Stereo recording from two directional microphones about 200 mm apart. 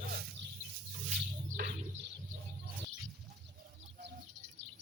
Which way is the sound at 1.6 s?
50° right (ahead or behind).